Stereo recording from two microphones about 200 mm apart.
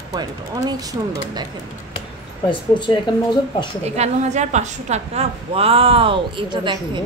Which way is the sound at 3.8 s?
35° right (ahead or behind).